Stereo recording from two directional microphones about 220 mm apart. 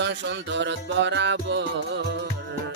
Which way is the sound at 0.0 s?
55° right (ahead or behind).